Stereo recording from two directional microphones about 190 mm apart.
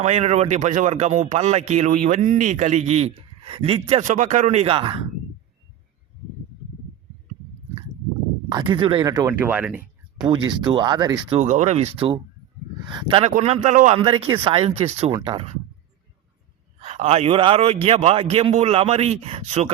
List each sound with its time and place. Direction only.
0.0 s speech: 35° right (ahead or behind)
8.4 s speech: 25° right (ahead or behind); by 10.2 s 5° right (ahead or behind)
10.2 s speech: 25° right (ahead or behind)
11.3 s speech: 40° right (ahead or behind)
16.8 s speech: 35° right (ahead or behind)